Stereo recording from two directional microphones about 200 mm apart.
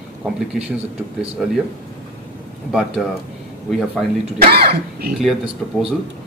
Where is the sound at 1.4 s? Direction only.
5° right (ahead or behind).